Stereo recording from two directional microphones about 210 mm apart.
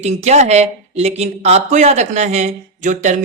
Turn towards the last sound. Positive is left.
turn(degrees=-35)  # may be behind; listen again after turning